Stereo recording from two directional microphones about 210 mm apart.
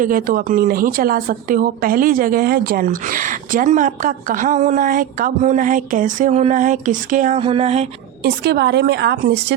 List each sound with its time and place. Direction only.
0.0 s a woman's voice: 40° right (ahead or behind)
7.3 s a sound: 25° right (ahead or behind)
8.2 s a woman's voice: 50° right (ahead or behind)